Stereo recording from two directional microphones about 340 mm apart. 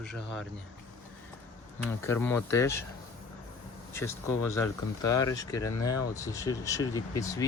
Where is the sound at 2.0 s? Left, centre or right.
Centre.